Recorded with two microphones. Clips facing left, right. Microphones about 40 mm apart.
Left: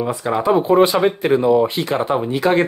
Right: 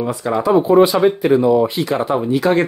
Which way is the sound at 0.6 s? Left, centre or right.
Left.